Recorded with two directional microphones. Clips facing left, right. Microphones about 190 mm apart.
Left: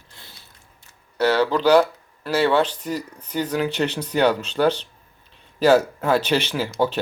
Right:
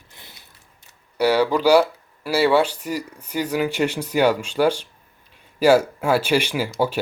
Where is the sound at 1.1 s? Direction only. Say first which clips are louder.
Right 1 dB; 10° right (ahead or behind).